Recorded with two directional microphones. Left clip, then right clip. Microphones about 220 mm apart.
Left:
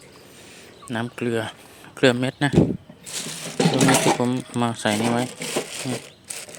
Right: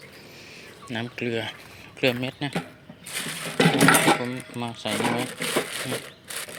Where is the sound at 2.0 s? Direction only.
30° left (ahead or behind).